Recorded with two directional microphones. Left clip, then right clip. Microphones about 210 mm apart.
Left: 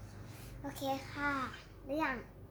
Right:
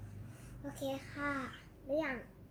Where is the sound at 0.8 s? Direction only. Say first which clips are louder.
Left 3 dB; 20° left (ahead or behind).